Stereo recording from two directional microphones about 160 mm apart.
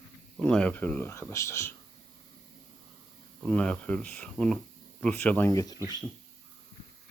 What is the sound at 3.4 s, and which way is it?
Speech, 5° left (ahead or behind).